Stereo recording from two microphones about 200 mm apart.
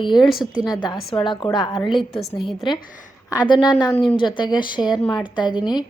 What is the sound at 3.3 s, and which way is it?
A woman's voice, 20° left (ahead or behind).